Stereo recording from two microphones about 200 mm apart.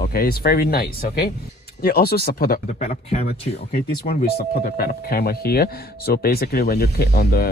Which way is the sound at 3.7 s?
50° left (ahead or behind).